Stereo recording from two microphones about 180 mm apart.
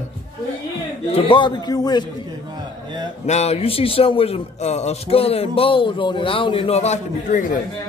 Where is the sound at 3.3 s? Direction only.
35° left (ahead or behind).